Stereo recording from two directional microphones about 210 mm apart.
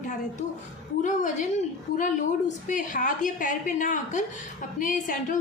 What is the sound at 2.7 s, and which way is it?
A woman's voice, 35° left (ahead or behind).